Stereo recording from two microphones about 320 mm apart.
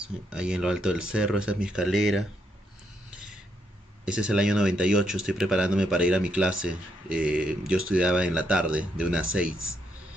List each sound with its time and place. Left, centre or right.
0.3 s speech: centre
4.0 s speech: centre